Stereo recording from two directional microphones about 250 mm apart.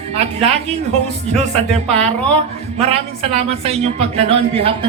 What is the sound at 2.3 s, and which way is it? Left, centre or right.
Speech, right.